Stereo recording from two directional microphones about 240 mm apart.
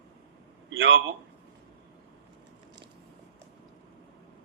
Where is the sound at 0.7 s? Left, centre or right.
Right.